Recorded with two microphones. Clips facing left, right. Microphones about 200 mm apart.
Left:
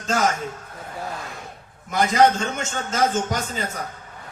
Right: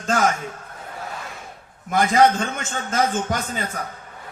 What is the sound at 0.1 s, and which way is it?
Speech, 50° right (ahead or behind).